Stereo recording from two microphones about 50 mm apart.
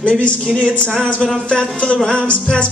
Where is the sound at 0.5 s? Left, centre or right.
Left.